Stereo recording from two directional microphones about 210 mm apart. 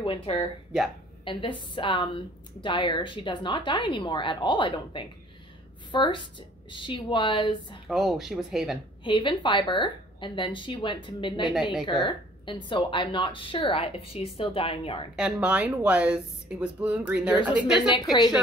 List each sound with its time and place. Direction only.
0.0 s a woman's voice: 25° left (ahead or behind)
7.9 s speech: centre (ahead or behind)
9.0 s a woman's voice: 20° left (ahead or behind)
11.5 s speech: centre (ahead or behind)
12.1 s a woman's voice: 25° left (ahead or behind)
15.1 s speech: 5° right (ahead or behind)
17.7 s a woman's voice: 20° left (ahead or behind)